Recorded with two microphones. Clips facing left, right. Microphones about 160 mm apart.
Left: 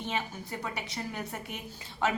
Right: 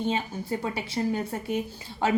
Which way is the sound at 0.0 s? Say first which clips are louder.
Right 6 dB; 30° right (ahead or behind).